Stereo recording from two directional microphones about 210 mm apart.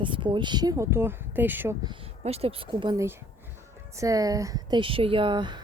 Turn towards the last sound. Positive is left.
turn(degrees=-20)  # may be behind; listen again after turning